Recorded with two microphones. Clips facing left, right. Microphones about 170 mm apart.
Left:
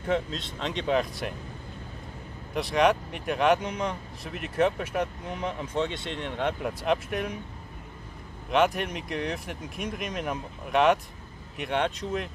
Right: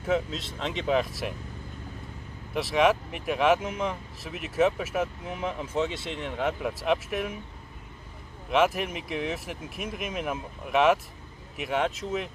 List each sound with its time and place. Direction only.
0.0 s speech: 5° right (ahead or behind)
2.5 s speech: centre (ahead or behind)
8.5 s speech: 5° right (ahead or behind)